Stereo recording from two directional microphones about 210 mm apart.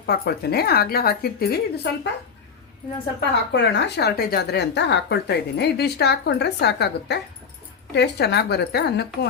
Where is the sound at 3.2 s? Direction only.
55° left (ahead or behind).